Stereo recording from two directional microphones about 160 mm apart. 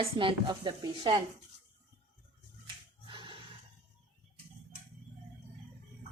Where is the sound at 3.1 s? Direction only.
30° right (ahead or behind).